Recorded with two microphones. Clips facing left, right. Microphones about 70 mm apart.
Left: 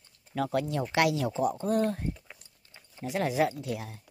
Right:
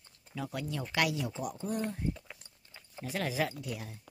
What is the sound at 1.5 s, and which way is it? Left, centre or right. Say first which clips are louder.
Speech: left 8 dB; left.